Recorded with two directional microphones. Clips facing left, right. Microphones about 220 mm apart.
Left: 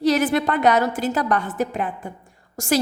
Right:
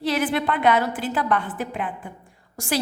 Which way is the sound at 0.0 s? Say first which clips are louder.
Left 4 dB; 45° left (ahead or behind).